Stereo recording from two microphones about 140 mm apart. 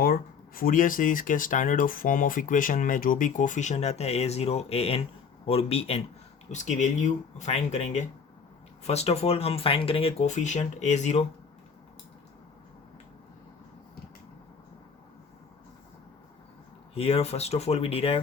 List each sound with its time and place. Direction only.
0.0 s speech: 90° left; by 6.0 s 45° left (ahead or behind)
6.5 s speech: 60° left (ahead or behind)
16.9 s speech: 45° left (ahead or behind)